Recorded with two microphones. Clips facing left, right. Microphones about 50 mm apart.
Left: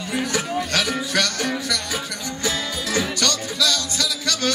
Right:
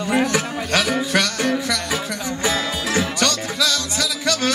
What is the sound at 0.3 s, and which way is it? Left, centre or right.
Music, right.